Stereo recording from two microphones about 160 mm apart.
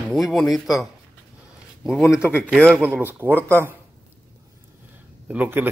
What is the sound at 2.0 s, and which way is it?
Speech, 15° left (ahead or behind).